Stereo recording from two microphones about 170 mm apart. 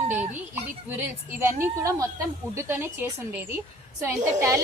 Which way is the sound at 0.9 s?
10° right (ahead or behind).